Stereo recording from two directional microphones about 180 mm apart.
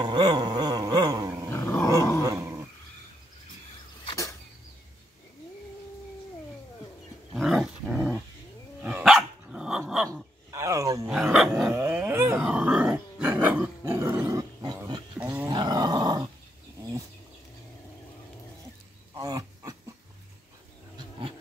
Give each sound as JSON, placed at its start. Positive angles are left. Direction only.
{"t": 0.0, "sound": "a sound", "side_deg": -25}
{"t": 1.5, "sound": "dog", "side_deg": 15}
{"t": 2.2, "sound": "dog", "side_deg": -15}
{"t": 4.0, "sound": "a sound", "side_deg": 20}
{"t": 7.3, "sound": "roaring cats", "side_deg": 0}
{"t": 8.8, "sound": "dog", "side_deg": -5}
{"t": 10.5, "sound": "wild animals", "side_deg": -15}
{"t": 11.1, "sound": "dog", "side_deg": 0}
{"t": 11.7, "sound": "dog", "side_deg": -10}
{"t": 19.1, "sound": "dog", "side_deg": -20}